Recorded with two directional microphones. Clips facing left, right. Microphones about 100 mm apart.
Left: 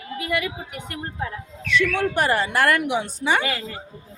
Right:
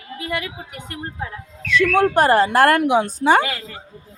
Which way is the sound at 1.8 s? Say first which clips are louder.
Right 6 dB; 45° right (ahead or behind).